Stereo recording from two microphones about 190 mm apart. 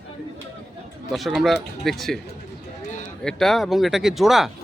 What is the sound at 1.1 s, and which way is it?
Speech, centre (ahead or behind).